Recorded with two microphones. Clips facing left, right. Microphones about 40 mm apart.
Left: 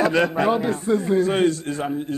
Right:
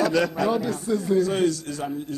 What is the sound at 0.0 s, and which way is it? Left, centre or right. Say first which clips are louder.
A man's voice: left 3 dB; left.